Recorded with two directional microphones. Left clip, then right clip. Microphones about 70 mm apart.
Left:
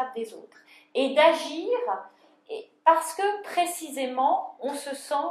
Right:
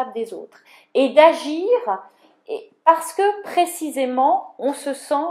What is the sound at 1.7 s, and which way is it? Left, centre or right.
A woman's voice, right.